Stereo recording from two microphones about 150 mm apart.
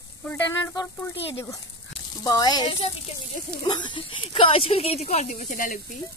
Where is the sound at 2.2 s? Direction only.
25° left (ahead or behind); by 5.8 s 65° left (ahead or behind).